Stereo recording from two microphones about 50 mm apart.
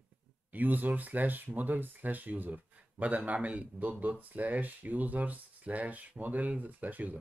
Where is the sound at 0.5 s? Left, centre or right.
Right.